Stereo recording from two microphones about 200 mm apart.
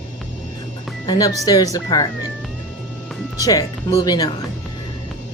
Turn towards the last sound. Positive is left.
turn(degrees=20)  # may be behind; listen again after turning